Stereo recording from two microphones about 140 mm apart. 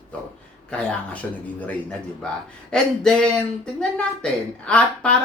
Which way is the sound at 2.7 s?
5° left (ahead or behind).